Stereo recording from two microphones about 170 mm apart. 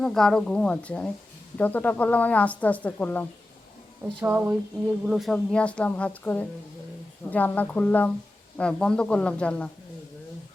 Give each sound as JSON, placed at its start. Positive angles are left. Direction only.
{"t": 0.0, "sound": "a woman's voice", "side_deg": 5}
{"t": 4.2, "sound": "a sound", "side_deg": -10}
{"t": 5.0, "sound": "a woman's voice", "side_deg": 0}